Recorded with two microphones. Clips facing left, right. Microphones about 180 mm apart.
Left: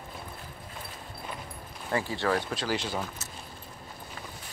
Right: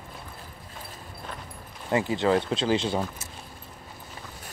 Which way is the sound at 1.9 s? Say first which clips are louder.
Right 5 dB; 20° right (ahead or behind).